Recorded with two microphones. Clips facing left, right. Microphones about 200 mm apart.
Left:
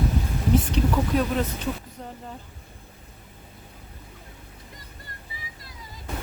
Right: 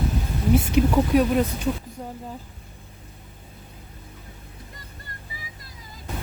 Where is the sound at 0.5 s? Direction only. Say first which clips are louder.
Right 4 dB; 10° right (ahead or behind).